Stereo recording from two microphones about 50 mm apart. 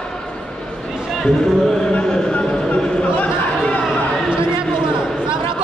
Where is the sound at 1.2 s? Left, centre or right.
Centre.